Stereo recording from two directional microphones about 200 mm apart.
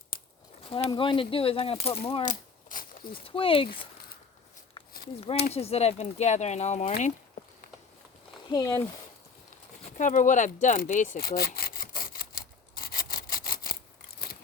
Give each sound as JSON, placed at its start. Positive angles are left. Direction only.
{"t": 0.6, "sound": "speech", "side_deg": 25}
{"t": 2.6, "sound": "a sound", "side_deg": 45}
{"t": 3.2, "sound": "speech", "side_deg": 25}
{"t": 5.5, "sound": "speech", "side_deg": 30}
{"t": 8.4, "sound": "speech", "side_deg": 20}
{"t": 9.8, "sound": "a sound", "side_deg": 40}